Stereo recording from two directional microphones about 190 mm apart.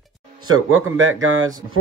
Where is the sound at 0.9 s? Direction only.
90° right.